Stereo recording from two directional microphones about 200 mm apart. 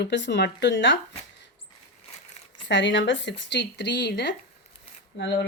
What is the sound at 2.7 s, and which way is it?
A woman's voice, 65° left (ahead or behind).